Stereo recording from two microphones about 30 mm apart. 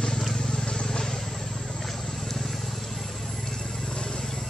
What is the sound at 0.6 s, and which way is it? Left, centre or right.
Vehicle, left.